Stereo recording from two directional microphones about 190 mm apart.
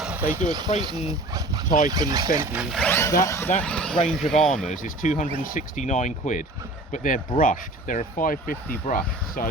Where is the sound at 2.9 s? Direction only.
15° left (ahead or behind).